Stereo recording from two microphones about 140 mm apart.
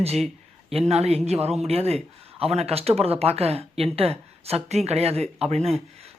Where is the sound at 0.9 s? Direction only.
50° right (ahead or behind).